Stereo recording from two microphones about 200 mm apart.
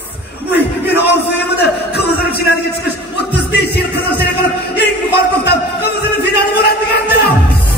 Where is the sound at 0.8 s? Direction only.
55° left (ahead or behind).